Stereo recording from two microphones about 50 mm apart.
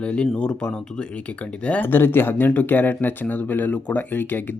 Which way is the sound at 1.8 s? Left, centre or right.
Left.